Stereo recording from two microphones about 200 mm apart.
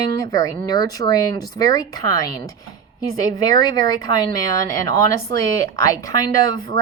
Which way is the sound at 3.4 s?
20° left (ahead or behind).